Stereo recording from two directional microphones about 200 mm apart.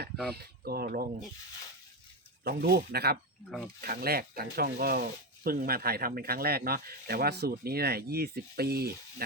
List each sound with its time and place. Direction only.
0.3 s speech: 50° right (ahead or behind)
2.4 s speech: 55° right (ahead or behind)